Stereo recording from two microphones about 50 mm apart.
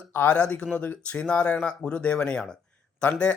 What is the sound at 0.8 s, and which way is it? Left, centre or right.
Speech, left.